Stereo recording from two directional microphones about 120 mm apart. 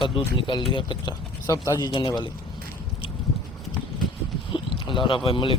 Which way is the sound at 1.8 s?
40° left (ahead or behind).